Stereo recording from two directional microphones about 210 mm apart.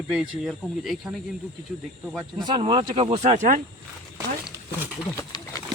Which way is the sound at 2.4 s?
25° right (ahead or behind).